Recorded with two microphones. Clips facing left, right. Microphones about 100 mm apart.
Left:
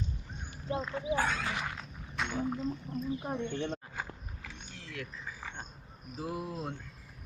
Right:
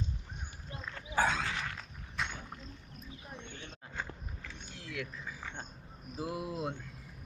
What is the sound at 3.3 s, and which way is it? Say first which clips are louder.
Speech: left 13 dB; 75° left (ahead or behind).